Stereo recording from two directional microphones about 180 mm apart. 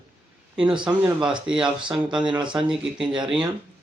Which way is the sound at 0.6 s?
25° right (ahead or behind).